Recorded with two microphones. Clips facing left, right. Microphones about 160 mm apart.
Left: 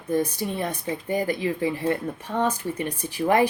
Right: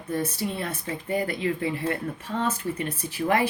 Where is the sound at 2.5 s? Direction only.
15° left (ahead or behind).